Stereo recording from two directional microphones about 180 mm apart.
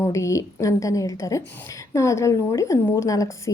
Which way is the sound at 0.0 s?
15° left (ahead or behind).